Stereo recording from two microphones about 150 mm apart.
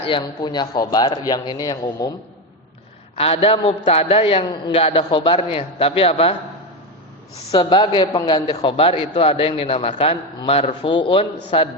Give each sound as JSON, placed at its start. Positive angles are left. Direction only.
{"t": 0.1, "sound": "a man's voice", "side_deg": 30}
{"t": 3.2, "sound": "a man's voice", "side_deg": 40}
{"t": 7.5, "sound": "a man's voice", "side_deg": 30}